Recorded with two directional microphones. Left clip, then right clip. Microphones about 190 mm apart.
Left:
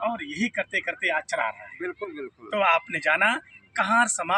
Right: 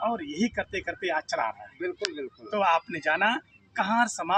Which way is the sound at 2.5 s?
20° left (ahead or behind).